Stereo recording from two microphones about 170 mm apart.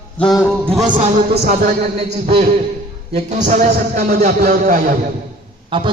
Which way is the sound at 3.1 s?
45° right (ahead or behind).